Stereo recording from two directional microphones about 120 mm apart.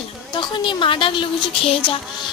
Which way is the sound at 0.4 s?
45° left (ahead or behind).